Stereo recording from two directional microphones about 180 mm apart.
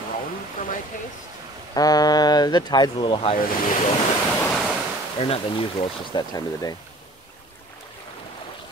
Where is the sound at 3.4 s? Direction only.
50° left (ahead or behind).